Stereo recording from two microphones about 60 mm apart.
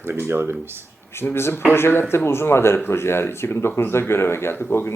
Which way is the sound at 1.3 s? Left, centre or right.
Left.